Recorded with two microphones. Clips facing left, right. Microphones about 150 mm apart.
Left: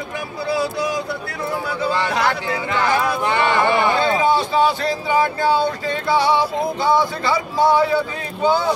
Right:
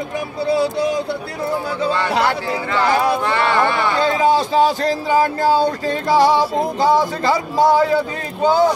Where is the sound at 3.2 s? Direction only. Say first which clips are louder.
Even; 20° left (ahead or behind).